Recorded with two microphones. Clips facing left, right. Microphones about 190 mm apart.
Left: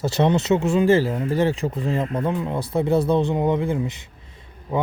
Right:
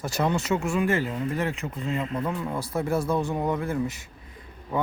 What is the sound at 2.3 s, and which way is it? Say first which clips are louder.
Speech: left 5 dB; 20° left (ahead or behind).